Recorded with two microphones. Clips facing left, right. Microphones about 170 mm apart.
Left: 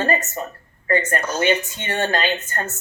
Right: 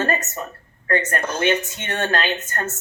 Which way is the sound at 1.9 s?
10° left (ahead or behind).